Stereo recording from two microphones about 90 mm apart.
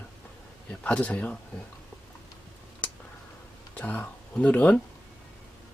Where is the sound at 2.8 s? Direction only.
20° left (ahead or behind).